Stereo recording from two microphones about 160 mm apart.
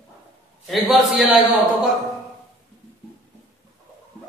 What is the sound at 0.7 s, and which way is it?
Speech, centre (ahead or behind).